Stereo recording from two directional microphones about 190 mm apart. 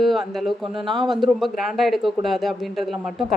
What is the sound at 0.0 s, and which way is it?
A man's voice, centre (ahead or behind).